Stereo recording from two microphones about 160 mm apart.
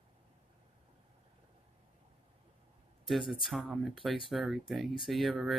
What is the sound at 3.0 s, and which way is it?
Speech, centre (ahead or behind).